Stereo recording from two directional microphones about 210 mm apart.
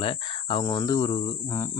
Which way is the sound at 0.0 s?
25° left (ahead or behind).